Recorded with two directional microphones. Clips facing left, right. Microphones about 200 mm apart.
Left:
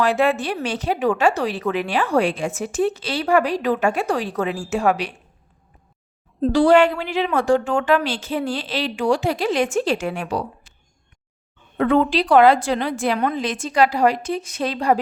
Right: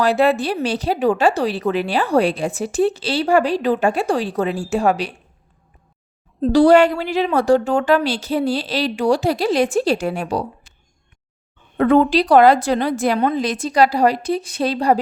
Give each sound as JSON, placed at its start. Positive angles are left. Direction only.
{"t": 0.0, "sound": "a woman's voice", "side_deg": -35}
{"t": 6.5, "sound": "a woman's voice", "side_deg": -40}
{"t": 11.8, "sound": "a woman's voice", "side_deg": -40}